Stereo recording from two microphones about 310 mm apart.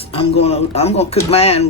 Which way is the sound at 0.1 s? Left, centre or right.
Centre.